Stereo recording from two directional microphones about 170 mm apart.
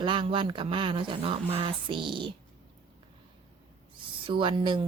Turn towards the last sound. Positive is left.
turn(degrees=-30)  # may be behind; listen again after turning